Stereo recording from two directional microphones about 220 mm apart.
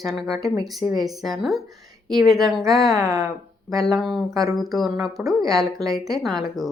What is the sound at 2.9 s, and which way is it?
Speech, 15° right (ahead or behind).